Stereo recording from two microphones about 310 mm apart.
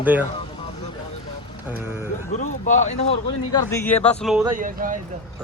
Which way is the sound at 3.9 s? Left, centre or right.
Left.